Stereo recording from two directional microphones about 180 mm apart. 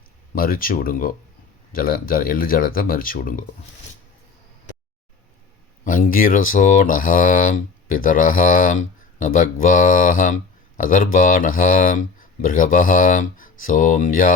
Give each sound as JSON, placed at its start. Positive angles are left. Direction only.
{"t": 0.3, "sound": "speech", "side_deg": 50}
{"t": 5.8, "sound": "speech", "side_deg": 50}